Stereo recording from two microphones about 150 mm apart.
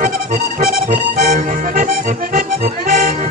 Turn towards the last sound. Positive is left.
turn(degrees=-60)  # may be behind; listen again after turning